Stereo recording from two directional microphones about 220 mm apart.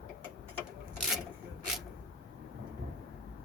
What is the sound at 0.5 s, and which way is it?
Rub, 5° left (ahead or behind).